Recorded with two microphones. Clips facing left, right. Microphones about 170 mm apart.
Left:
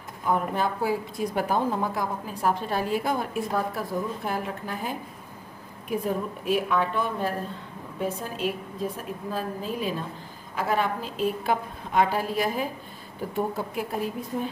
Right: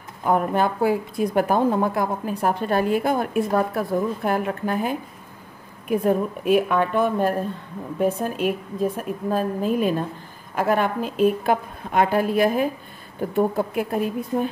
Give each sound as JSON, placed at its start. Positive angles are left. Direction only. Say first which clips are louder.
{"t": 0.2, "sound": "a woman's voice", "louder": "right 5 dB", "side_deg": -60}